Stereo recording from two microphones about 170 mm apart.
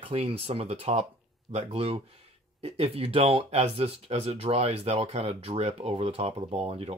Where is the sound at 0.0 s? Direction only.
35° right (ahead or behind).